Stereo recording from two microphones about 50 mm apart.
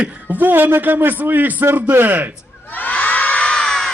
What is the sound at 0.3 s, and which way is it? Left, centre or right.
A man's voice, right.